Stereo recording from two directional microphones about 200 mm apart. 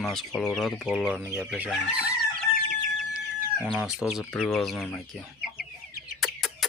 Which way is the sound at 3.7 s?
Centre (ahead or behind).